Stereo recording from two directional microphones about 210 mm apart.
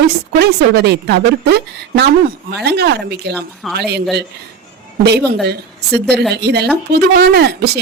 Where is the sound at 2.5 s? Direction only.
55° right (ahead or behind).